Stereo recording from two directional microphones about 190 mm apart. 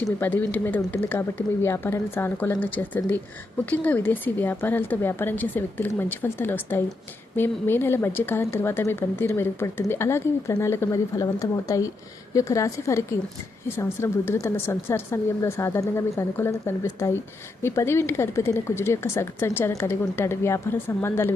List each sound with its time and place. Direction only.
0.2 s speech: 10° left (ahead or behind)